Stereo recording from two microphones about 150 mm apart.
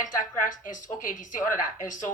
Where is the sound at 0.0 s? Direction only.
60° left (ahead or behind).